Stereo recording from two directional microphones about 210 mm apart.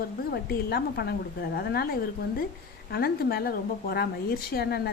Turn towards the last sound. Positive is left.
turn(degrees=50)  # may be behind; listen again after turning